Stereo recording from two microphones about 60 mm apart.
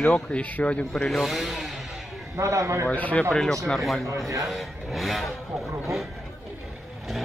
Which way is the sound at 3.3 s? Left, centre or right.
Centre.